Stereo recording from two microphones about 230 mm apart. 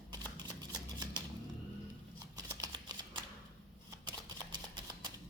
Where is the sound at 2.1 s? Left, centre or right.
Centre.